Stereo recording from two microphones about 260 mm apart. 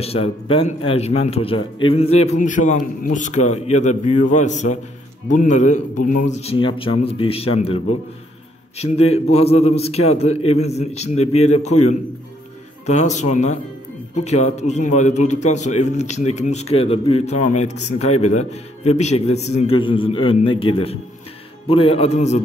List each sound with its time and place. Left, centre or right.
0.0 s a man's voice: left
12.8 s a man's voice: left